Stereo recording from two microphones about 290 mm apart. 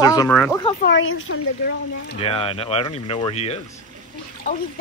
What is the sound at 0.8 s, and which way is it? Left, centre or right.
Speech, left.